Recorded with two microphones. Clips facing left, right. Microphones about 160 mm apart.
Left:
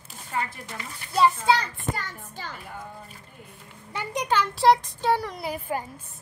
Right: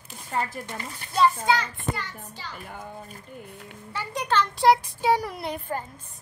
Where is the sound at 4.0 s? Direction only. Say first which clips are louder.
Even; 15° left (ahead or behind).